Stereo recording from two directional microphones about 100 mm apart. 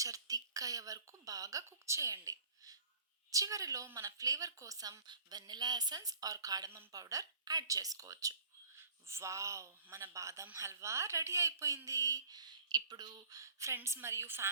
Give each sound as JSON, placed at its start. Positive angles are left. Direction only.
{"t": 0.0, "sound": "a woman's voice", "side_deg": -35}